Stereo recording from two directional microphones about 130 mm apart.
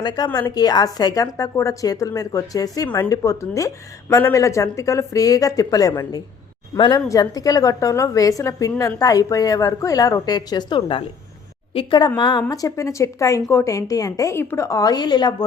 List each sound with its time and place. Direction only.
0.3 s speech: 30° left (ahead or behind)
7.1 s speech: 30° left (ahead or behind)